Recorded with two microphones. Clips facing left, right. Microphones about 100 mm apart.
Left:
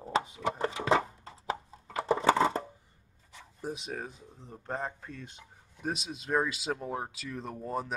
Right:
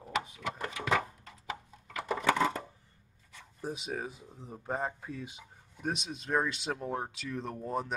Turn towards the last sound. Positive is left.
turn(degrees=0)  # may be behind; listen again after turning